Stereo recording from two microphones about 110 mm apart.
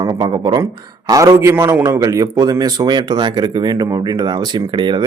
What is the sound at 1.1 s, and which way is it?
Speech, 30° right (ahead or behind).